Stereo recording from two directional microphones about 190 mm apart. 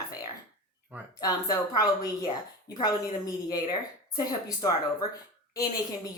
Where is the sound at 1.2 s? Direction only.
20° left (ahead or behind).